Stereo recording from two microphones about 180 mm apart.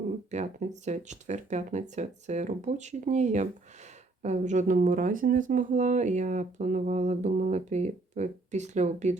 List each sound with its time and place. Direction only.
0.3 s speech: 40° right (ahead or behind)